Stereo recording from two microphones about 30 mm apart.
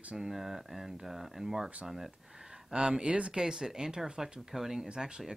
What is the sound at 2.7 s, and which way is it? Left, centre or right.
Speech, right.